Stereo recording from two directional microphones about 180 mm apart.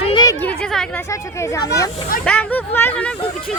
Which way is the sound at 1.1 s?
15° left (ahead or behind).